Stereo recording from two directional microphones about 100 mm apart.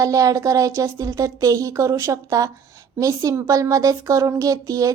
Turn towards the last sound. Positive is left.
turn(degrees=-35)  # may be behind; listen again after turning